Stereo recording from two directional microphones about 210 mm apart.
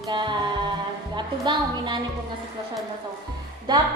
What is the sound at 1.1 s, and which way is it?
Speech, 20° right (ahead or behind).